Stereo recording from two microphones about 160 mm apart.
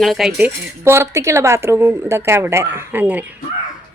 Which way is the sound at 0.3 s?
10° right (ahead or behind).